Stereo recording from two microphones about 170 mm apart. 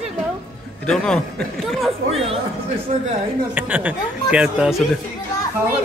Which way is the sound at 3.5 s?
10° right (ahead or behind).